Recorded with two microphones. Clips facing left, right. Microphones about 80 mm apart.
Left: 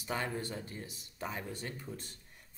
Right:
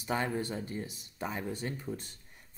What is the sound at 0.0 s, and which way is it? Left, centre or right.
Speech, right.